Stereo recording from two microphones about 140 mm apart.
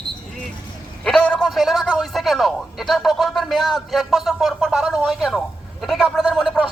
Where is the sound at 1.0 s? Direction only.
5° left (ahead or behind).